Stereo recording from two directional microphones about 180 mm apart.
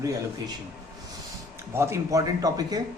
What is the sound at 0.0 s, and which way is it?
Speech, 20° right (ahead or behind).